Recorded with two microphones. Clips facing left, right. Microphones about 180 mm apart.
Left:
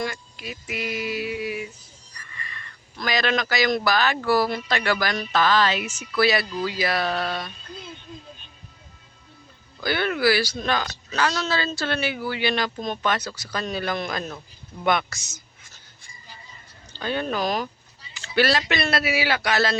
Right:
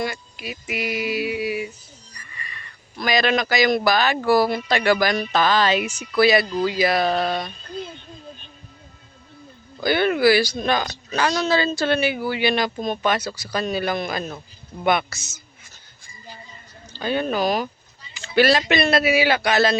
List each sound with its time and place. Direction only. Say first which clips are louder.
0.0 s a sound: right 2 dB; 10° right (ahead or behind)
3.0 s speech: right 4 dB; 15° right (ahead or behind)
9.8 s speech: right 5 dB; 20° right (ahead or behind)
16.9 s speech: right 3 dB; 10° right (ahead or behind)